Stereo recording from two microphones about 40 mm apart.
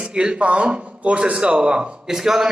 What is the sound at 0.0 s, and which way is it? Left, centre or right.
Speech, right.